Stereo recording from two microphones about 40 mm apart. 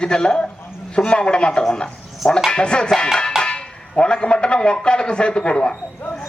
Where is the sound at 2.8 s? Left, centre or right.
Centre.